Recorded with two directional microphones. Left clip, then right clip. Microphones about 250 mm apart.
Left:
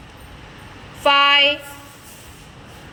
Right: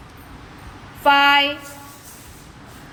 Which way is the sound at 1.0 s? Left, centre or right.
Centre.